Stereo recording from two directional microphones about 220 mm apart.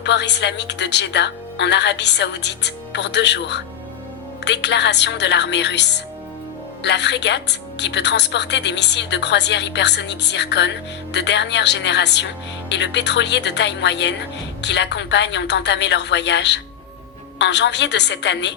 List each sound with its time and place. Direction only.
0.0 s a woman's voice: 50° left (ahead or behind)